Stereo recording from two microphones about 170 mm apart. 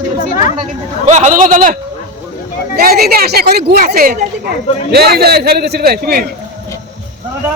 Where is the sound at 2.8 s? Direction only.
65° right (ahead or behind).